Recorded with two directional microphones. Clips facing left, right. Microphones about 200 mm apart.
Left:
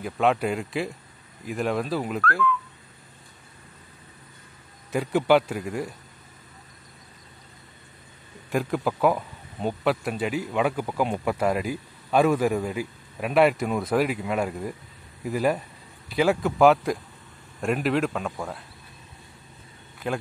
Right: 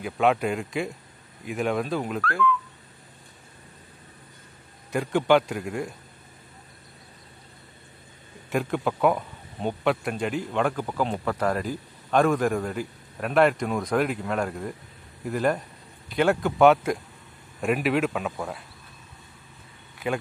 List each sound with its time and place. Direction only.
0.0 s speech: centre (ahead or behind)
4.9 s speech: 5° left (ahead or behind)
8.5 s speech: centre (ahead or behind)